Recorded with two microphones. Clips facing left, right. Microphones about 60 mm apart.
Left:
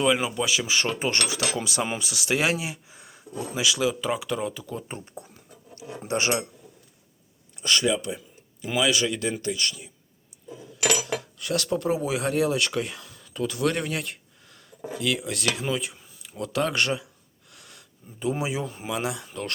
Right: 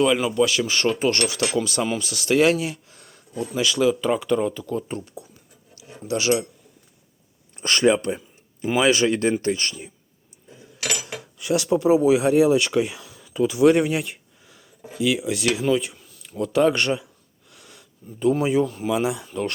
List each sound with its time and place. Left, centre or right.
0.2 s speech: centre
0.9 s speech: centre
4.9 s speech: left
7.5 s speech: right
11.3 s speech: centre
16.0 s speech: centre
17.5 s sniff: centre
18.9 s speech: centre